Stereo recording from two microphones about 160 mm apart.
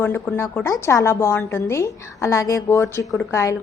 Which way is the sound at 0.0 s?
15° left (ahead or behind).